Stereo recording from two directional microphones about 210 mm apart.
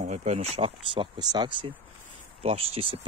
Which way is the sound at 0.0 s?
35° right (ahead or behind).